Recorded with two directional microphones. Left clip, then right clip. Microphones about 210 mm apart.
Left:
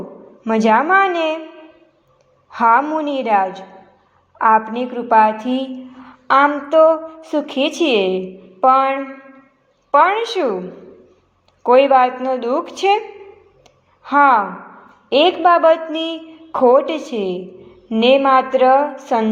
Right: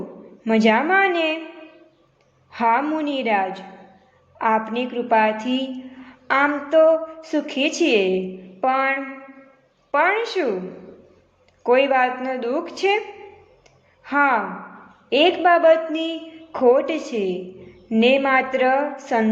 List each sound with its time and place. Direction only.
0.4 s a woman's voice: 15° left (ahead or behind)
2.5 s a woman's voice: 15° left (ahead or behind)
6.1 s a sound: 25° left (ahead or behind)
6.7 s a woman's voice: 25° left (ahead or behind)
11.6 s a woman's voice: 25° left (ahead or behind)
14.0 s a woman's voice: 25° left (ahead or behind)